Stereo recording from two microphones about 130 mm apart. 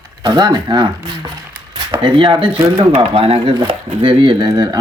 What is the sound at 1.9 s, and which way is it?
Speech, 40° right (ahead or behind).